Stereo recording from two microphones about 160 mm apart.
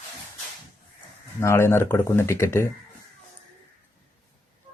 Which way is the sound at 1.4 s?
15° left (ahead or behind).